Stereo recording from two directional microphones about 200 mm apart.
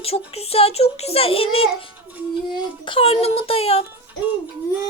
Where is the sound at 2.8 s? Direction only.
25° left (ahead or behind).